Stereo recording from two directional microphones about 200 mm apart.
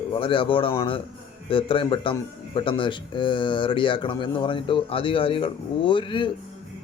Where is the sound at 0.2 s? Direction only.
25° left (ahead or behind).